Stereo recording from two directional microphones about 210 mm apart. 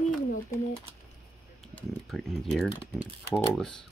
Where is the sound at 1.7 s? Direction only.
Centre (ahead or behind).